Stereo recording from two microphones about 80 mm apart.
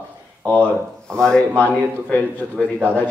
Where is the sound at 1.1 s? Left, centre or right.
Centre.